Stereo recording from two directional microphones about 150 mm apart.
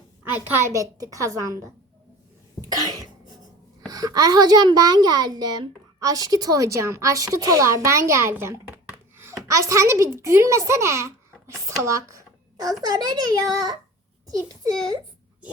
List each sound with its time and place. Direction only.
0.3 s a woman's voice: 15° right (ahead or behind)
2.6 s cough: 25° right (ahead or behind)
3.8 s a child's voice: 25° right (ahead or behind)